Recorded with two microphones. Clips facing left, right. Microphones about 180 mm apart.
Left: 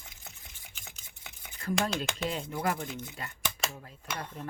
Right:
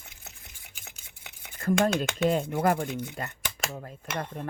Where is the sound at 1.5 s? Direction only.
45° right (ahead or behind).